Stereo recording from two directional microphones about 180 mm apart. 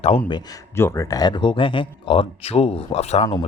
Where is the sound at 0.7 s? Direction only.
15° left (ahead or behind); by 3.2 s 35° left (ahead or behind).